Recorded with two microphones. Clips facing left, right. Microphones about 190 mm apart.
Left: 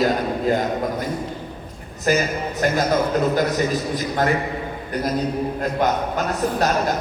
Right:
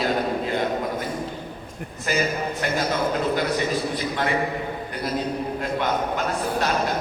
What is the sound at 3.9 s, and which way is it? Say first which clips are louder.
Speech: left 4 dB; 40° left (ahead or behind).